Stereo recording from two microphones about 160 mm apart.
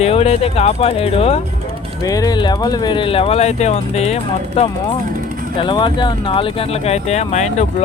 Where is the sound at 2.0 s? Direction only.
20° left (ahead or behind).